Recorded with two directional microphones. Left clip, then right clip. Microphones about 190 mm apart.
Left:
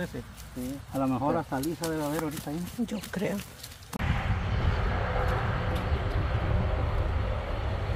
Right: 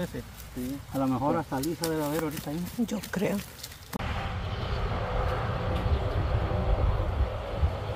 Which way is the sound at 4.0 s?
45° right (ahead or behind).